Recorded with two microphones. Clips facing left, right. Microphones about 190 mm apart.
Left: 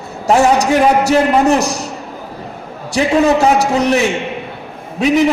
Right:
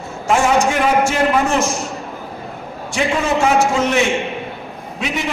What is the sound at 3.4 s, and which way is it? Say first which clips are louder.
Speech: left 3 dB; 35° left (ahead or behind).